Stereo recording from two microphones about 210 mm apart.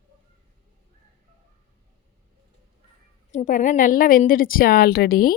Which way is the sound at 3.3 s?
35° left (ahead or behind).